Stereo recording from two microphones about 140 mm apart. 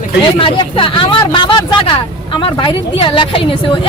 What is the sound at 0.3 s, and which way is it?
Speech, 35° left (ahead or behind).